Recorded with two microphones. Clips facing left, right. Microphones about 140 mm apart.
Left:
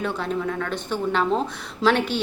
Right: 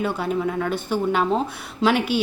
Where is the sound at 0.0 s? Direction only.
10° right (ahead or behind).